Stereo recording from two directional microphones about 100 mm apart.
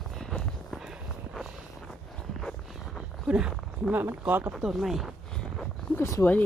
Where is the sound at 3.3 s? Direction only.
10° right (ahead or behind).